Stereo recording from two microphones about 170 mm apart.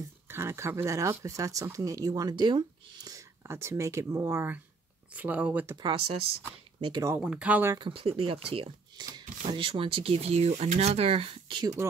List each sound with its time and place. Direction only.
0.3 s speech: 15° right (ahead or behind)
5.8 s speech: 30° right (ahead or behind)
6.9 s speech: 20° right (ahead or behind)
7.2 s speech: 5° right (ahead or behind)
7.7 s speech: 30° right (ahead or behind)